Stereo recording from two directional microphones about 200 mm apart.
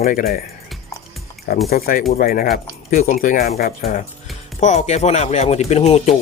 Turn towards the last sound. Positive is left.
turn(degrees=35)  # may be behind; listen again after turning